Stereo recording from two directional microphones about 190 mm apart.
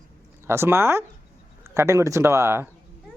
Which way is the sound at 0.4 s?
15° right (ahead or behind).